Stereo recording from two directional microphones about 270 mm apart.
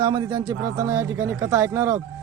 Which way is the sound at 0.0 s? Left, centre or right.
Centre.